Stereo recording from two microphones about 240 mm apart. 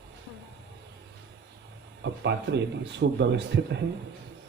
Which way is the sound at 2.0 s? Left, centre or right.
Right.